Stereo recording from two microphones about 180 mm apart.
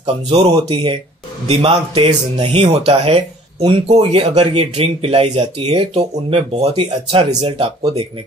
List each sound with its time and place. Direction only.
0.3 s speech: 30° right (ahead or behind)